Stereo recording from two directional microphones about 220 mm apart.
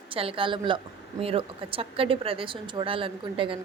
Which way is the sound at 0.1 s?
25° right (ahead or behind).